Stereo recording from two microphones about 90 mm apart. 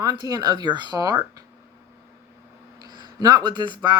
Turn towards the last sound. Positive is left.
turn(degrees=-60)  # may be behind; listen again after turning